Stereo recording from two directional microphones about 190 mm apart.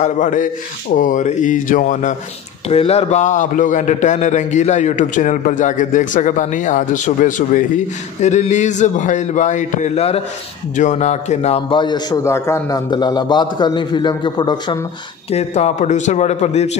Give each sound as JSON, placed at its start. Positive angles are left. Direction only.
{"t": 0.0, "sound": "a man's voice", "side_deg": 40}
{"t": 15.3, "sound": "a man's voice", "side_deg": 35}